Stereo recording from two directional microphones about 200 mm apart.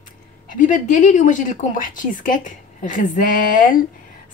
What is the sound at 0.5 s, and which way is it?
A woman's voice, 40° left (ahead or behind).